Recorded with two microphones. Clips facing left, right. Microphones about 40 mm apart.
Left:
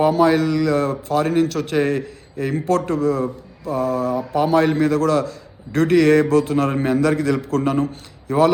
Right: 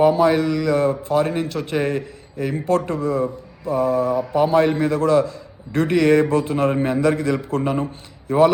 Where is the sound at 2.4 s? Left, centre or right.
Centre.